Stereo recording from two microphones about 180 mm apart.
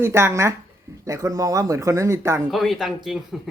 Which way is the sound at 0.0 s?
15° right (ahead or behind).